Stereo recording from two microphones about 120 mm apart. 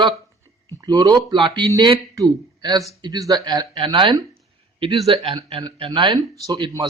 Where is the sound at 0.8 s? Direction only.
30° right (ahead or behind).